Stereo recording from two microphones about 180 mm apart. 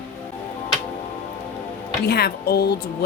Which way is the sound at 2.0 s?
60° left (ahead or behind).